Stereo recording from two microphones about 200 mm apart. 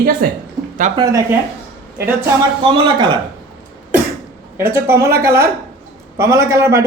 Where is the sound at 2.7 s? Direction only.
20° right (ahead or behind).